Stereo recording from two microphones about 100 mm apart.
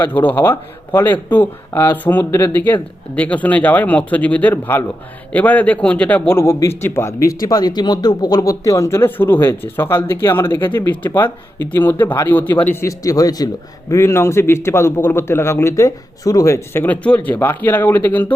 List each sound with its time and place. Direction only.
0.0 s a man's voice: 15° left (ahead or behind)
13.0 s a man's voice: 35° left (ahead or behind)
16.8 s a man's voice: 15° left (ahead or behind)